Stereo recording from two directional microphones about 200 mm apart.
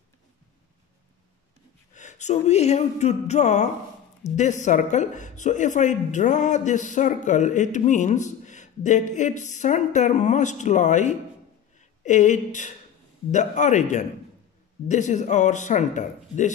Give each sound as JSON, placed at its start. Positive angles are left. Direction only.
{"t": 2.0, "sound": "speech", "side_deg": 35}